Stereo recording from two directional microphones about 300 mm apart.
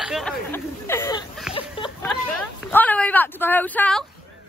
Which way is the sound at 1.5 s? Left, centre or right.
Centre.